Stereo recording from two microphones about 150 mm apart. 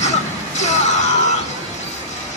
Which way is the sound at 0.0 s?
50° left (ahead or behind).